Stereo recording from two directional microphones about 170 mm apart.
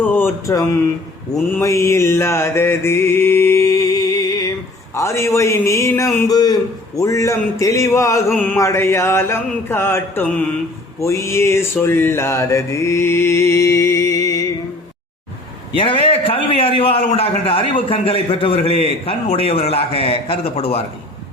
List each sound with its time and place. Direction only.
0.0 s a sound: 10° left (ahead or behind)
1.3 s mantra: 15° left (ahead or behind)
15.7 s a man's voice: 30° left (ahead or behind)